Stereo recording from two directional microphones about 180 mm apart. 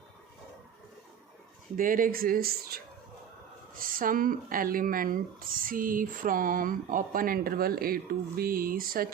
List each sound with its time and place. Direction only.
1.7 s speech: 50° right (ahead or behind)